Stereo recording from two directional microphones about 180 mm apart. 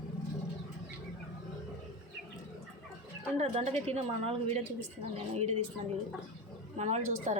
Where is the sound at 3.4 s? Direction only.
35° right (ahead or behind).